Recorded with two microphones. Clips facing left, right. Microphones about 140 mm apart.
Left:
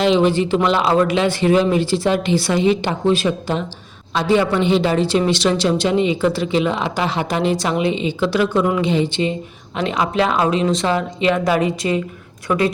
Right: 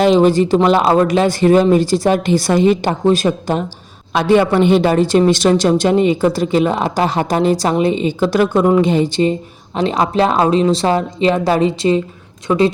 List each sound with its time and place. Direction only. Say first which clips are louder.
0.0 s a woman's voice: right 4 dB; 40° right (ahead or behind)
4.1 s a man's voice: right 4 dB; 60° right (ahead or behind); by 12.7 s 30° right (ahead or behind)